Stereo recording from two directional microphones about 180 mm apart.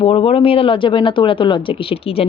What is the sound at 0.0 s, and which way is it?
A woman's voice, 30° left (ahead or behind).